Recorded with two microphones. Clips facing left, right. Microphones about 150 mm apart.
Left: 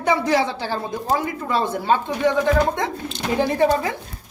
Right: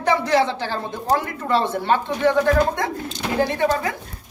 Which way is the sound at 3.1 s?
30° left (ahead or behind).